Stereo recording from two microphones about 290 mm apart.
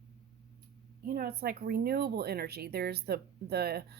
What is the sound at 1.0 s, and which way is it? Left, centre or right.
Speech, right.